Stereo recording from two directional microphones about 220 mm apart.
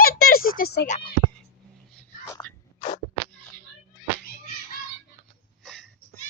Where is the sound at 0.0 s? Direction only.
40° left (ahead or behind).